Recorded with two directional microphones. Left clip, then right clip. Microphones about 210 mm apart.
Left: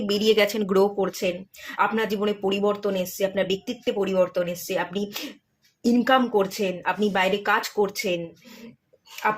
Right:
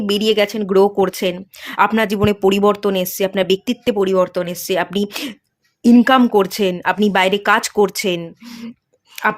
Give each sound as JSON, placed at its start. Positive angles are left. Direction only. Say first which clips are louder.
{"t": 0.0, "sound": "speech", "louder": "right 5 dB", "side_deg": -35}
{"t": 0.9, "sound": "speech", "louder": "right 8 dB", "side_deg": -50}